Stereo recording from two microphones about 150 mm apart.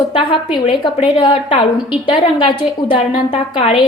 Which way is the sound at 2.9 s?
40° left (ahead or behind).